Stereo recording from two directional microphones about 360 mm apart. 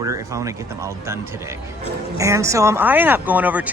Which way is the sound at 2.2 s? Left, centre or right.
Centre.